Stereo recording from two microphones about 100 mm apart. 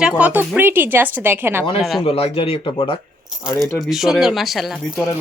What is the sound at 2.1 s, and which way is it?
Speech, 80° left.